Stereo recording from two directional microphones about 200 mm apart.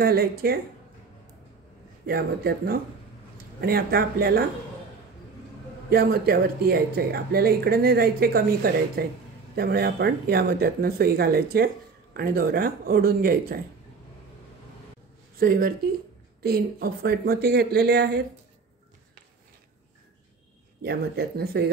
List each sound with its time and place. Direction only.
0.0 s speech: 50° right (ahead or behind)
2.0 s speech: 50° right (ahead or behind)
5.9 s speech: 50° right (ahead or behind)
15.3 s speech: 50° right (ahead or behind)
20.8 s speech: 50° right (ahead or behind)